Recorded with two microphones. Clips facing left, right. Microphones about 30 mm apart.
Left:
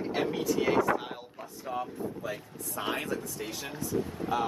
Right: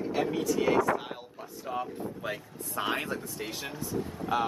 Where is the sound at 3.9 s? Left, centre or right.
Left.